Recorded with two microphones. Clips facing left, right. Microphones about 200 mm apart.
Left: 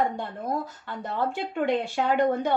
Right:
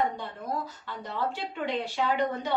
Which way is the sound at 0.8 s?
50° left (ahead or behind).